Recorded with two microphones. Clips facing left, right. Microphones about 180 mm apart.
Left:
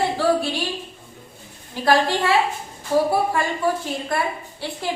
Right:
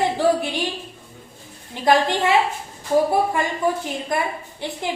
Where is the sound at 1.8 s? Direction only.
20° right (ahead or behind).